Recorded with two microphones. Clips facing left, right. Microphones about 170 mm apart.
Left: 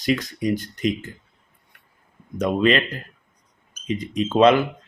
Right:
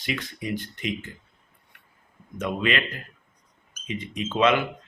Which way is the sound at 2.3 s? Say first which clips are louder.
Left 7 dB; 35° left (ahead or behind).